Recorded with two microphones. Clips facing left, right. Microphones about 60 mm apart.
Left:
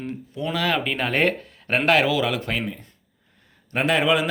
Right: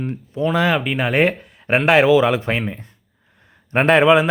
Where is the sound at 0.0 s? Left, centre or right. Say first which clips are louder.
Right 7 dB; right.